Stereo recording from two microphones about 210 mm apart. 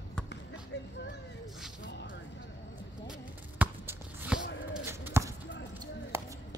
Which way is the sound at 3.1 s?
5° right (ahead or behind).